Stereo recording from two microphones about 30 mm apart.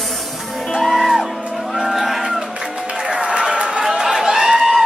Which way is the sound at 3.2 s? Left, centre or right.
Right.